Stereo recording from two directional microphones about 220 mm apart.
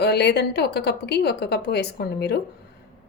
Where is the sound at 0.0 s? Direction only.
50° left (ahead or behind).